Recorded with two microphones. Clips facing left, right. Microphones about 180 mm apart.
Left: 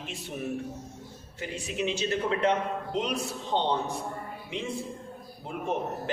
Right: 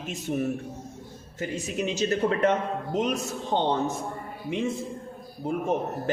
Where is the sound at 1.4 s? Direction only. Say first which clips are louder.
Right 3 dB; 45° right (ahead or behind).